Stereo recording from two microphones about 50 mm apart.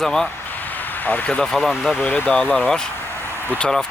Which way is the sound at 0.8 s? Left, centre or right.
Left.